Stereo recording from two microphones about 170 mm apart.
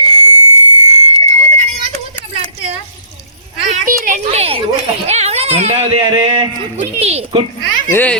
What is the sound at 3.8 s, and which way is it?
A child's voice, 45° right (ahead or behind).